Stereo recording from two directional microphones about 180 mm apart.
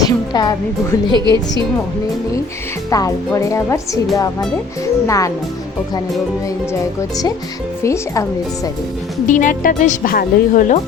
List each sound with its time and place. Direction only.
0.0 s speech: 20° left (ahead or behind)
1.1 s a woman's voice: 25° right (ahead or behind)
2.9 s a woman's voice: 20° left (ahead or behind)
7.9 s a woman's voice: 15° left (ahead or behind)
9.2 s speech: 45° left (ahead or behind)